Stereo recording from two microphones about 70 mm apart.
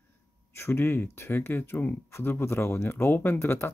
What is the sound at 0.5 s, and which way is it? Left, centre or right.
Speech, left.